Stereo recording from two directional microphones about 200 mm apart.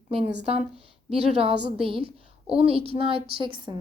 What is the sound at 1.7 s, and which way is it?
A child's voice, 25° right (ahead or behind).